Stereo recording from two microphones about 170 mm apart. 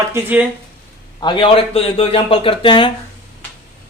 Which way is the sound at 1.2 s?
30° left (ahead or behind).